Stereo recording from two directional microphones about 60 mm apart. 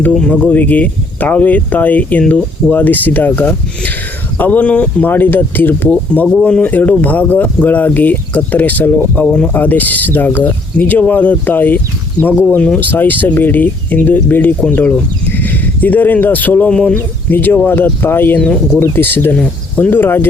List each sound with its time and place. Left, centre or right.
0.3 s speech: left
5.0 s speech: left
16.6 s speech: centre
17.2 s speech: left